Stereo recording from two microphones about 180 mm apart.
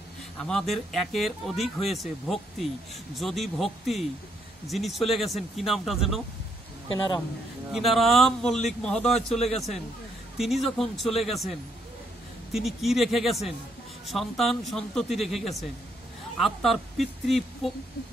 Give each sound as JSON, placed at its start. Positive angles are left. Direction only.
{"t": 0.4, "sound": "speech", "side_deg": 5}
{"t": 7.7, "sound": "speech", "side_deg": 0}
{"t": 12.5, "sound": "speech", "side_deg": 0}